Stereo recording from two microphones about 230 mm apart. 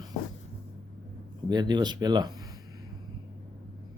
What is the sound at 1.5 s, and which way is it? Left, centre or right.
Speech, centre.